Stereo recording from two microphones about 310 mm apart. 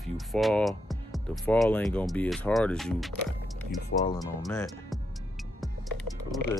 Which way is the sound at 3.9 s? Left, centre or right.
Left.